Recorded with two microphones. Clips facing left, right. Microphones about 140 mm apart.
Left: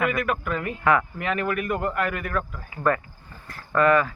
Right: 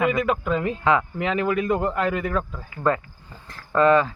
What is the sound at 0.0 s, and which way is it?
Speech, 20° right (ahead or behind).